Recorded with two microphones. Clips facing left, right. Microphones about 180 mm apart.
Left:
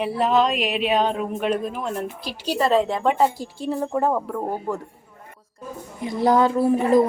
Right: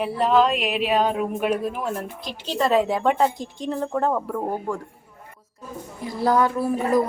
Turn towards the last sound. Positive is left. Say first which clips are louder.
# left 4 dB
turn(degrees=25)  # may be behind; listen again after turning